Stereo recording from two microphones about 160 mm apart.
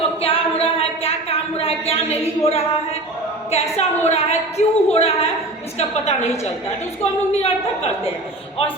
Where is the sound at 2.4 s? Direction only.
40° left (ahead or behind).